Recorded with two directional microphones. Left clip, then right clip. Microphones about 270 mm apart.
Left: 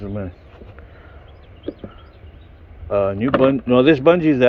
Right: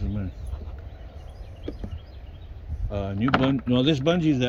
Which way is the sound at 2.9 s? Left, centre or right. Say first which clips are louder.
Left 8 dB; centre.